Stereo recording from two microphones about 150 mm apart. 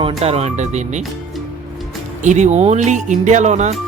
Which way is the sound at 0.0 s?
45° right (ahead or behind).